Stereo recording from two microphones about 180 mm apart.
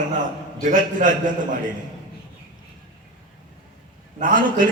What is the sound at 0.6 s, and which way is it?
A man's voice, 45° right (ahead or behind).